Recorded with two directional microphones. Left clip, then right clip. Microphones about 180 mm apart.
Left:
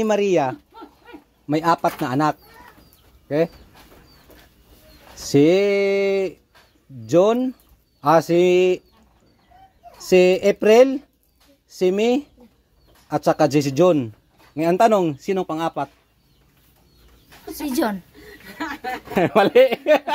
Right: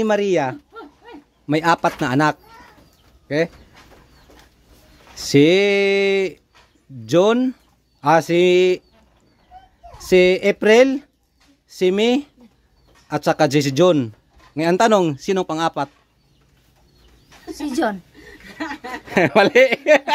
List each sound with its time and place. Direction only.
0.0 s speech: 10° right (ahead or behind)
1.5 s a man's voice: 25° right (ahead or behind)
3.3 s speech: 10° right (ahead or behind)
5.2 s a man's voice: 20° right (ahead or behind)
10.0 s a man's voice: 10° right (ahead or behind)
17.5 s speech: centre (ahead or behind)
19.1 s speech: 20° right (ahead or behind)